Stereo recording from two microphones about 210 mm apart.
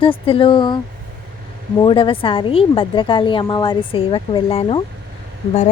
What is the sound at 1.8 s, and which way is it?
A woman's voice, 25° left (ahead or behind).